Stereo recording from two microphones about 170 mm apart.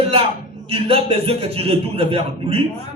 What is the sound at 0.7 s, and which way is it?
A man's voice, 35° right (ahead or behind).